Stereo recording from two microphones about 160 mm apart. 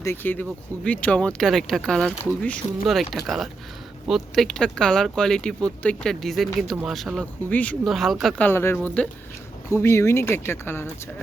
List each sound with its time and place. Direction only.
0.0 s speech: 15° left (ahead or behind)
8.4 s speech: 15° left (ahead or behind)